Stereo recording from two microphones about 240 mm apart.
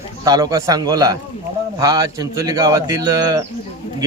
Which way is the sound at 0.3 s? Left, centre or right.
Centre.